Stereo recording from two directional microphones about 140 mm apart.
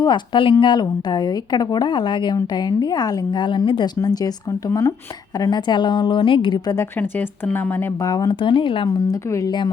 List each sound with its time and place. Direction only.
0.0 s a woman's voice: 35° left (ahead or behind)
6.7 s speech: 15° left (ahead or behind)
8.0 s a woman's voice: 25° left (ahead or behind)